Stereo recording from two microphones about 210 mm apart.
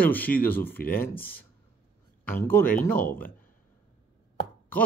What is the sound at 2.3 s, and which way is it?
Speech, 10° left (ahead or behind).